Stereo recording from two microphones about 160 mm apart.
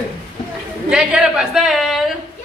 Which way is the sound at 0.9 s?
5° right (ahead or behind).